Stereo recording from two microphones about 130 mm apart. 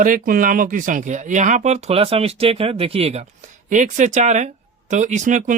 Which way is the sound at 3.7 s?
75° right (ahead or behind).